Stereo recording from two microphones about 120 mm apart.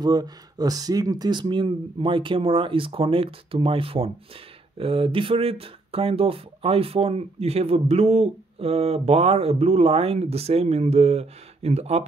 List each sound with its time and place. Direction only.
0.0 s speech: 35° right (ahead or behind); by 12.1 s 60° right (ahead or behind)